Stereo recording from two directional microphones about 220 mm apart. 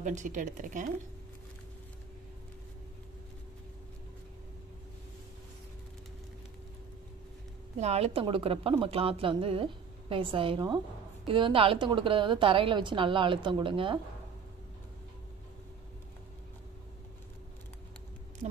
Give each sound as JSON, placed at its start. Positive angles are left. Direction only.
{"t": 0.0, "sound": "a woman's voice", "side_deg": -35}
{"t": 7.8, "sound": "a woman's voice", "side_deg": -30}
{"t": 18.4, "sound": "a sound", "side_deg": -30}